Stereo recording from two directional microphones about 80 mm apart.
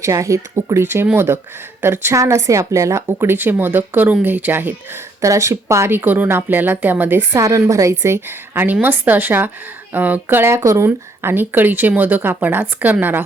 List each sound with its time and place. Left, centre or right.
0.0 s a woman's voice: right
3.2 s speech: right
5.2 s a woman's voice: right
7.3 s a woman's voice: right